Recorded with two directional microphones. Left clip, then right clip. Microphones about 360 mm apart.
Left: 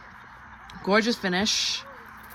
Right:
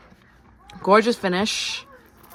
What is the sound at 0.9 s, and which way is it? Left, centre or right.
Speech, centre.